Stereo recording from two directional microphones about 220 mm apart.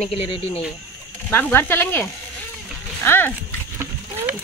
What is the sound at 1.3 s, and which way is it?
Speech, 10° left (ahead or behind).